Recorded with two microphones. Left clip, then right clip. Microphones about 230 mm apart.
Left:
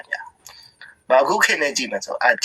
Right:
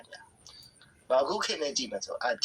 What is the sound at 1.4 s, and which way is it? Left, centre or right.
Speech, left.